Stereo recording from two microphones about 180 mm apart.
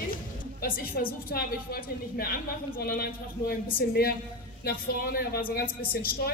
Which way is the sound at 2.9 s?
55° left (ahead or behind).